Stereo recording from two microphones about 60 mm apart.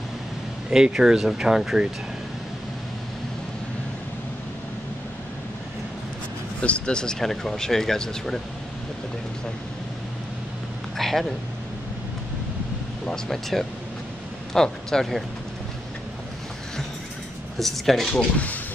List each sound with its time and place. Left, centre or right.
0.7 s speech: centre
6.6 s speech: centre
11.0 s speech: centre
13.0 s speech: centre
17.6 s speech: centre
18.1 s speech: left